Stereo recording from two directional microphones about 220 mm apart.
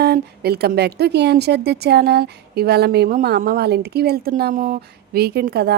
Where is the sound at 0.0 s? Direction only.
45° right (ahead or behind).